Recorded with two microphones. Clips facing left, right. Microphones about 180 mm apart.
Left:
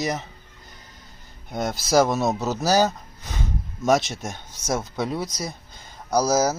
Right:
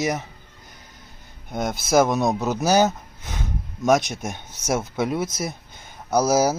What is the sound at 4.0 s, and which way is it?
Speech, 15° right (ahead or behind).